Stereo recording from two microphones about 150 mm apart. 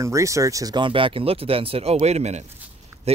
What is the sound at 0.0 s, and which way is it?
Speech, 20° right (ahead or behind).